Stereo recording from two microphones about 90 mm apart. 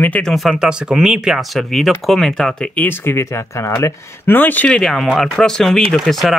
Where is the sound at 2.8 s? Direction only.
25° left (ahead or behind).